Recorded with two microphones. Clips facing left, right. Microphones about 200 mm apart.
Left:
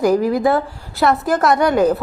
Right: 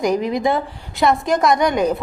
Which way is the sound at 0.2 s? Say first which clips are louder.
Left 3 dB; 15° right (ahead or behind).